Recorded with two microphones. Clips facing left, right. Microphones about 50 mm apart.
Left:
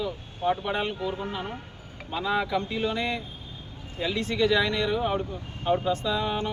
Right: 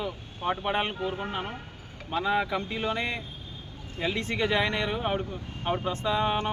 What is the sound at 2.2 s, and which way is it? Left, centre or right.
Speech, right.